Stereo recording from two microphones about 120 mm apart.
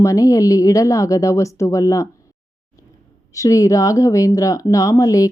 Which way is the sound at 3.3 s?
25° left (ahead or behind).